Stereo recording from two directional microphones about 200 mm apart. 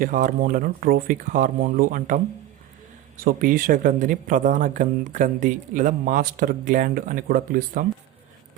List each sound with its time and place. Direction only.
0.0 s speech: 40° right (ahead or behind)